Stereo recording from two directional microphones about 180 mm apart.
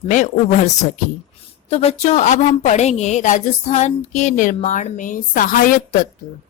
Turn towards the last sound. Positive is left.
turn(degrees=45)  # may be behind; listen again after turning